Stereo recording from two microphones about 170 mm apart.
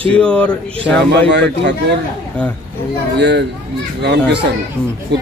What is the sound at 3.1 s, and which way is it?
A man's voice, 90° right.